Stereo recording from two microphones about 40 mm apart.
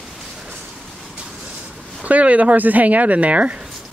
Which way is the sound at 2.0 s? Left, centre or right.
Right.